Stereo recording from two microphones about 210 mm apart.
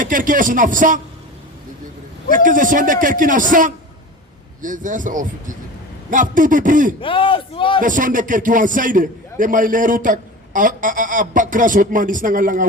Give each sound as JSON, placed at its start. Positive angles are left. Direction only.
{"t": 0.0, "sound": "a man's voice", "side_deg": -40}
{"t": 2.3, "sound": "a man's voice", "side_deg": -40}
{"t": 7.0, "sound": "speech", "side_deg": 25}
{"t": 7.8, "sound": "a man's voice", "side_deg": -40}